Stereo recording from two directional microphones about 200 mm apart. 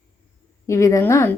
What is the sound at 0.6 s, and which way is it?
Speech, 15° left (ahead or behind).